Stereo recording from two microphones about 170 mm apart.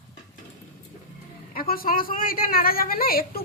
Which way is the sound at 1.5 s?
60° left (ahead or behind).